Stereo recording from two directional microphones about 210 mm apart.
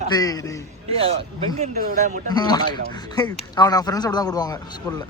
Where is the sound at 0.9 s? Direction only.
25° right (ahead or behind).